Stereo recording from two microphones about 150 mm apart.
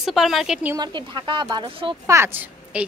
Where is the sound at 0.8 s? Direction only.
30° right (ahead or behind).